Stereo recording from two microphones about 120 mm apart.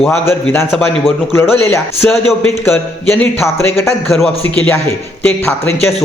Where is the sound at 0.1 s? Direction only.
20° left (ahead or behind).